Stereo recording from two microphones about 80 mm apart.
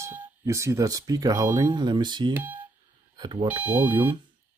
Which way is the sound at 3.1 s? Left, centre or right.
Right.